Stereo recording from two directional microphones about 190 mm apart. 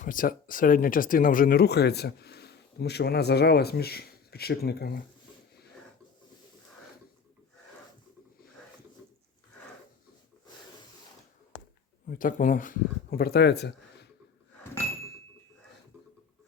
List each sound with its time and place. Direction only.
0.0 s speech: 45° left (ahead or behind)
12.0 s speech: 45° left (ahead or behind); by 14.1 s 60° left (ahead or behind)